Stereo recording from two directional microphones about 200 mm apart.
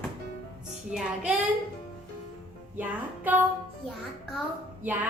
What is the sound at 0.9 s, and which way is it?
Music, 5° right (ahead or behind).